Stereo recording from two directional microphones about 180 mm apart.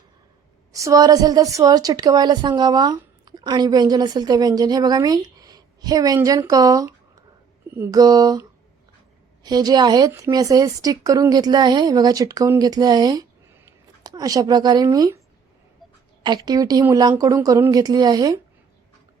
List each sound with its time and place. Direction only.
0.7 s a woman's voice: 15° right (ahead or behind)
16.2 s a woman's voice: 25° right (ahead or behind)